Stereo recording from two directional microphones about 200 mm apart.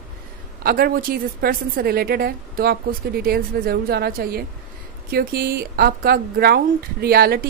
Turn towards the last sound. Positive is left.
turn(degrees=-50)  # may be behind; listen again after turning